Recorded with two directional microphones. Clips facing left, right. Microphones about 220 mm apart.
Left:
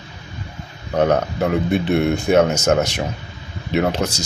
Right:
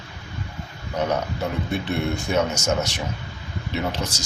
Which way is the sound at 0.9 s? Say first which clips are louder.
Left 7 dB; 55° left (ahead or behind).